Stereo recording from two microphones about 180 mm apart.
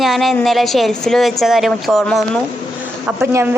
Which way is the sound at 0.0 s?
Centre (ahead or behind).